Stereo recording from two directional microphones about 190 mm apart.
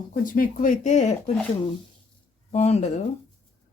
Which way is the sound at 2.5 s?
35° left (ahead or behind).